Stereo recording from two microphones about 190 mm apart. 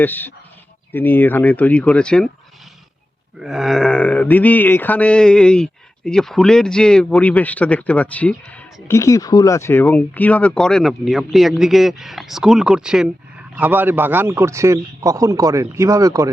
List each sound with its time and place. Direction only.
0.0 s speech: 10° left (ahead or behind)
3.3 s a man's voice: centre (ahead or behind); by 16.3 s 15° right (ahead or behind)